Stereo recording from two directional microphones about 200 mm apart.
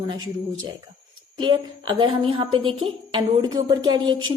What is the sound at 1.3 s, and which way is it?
A woman's voice, 25° right (ahead or behind).